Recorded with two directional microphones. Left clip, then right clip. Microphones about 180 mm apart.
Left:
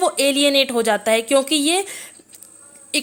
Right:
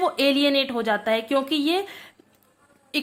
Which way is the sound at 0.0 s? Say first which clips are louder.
Left 4 dB; 35° left (ahead or behind).